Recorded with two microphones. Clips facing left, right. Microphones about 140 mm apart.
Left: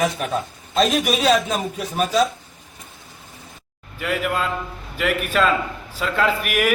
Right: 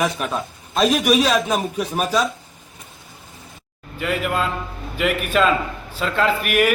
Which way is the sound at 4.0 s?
Centre (ahead or behind).